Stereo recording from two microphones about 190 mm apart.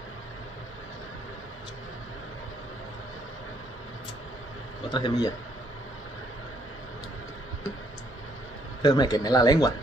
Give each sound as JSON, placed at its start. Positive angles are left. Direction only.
{"t": 4.9, "sound": "speech", "side_deg": 20}
{"t": 8.8, "sound": "speech", "side_deg": 20}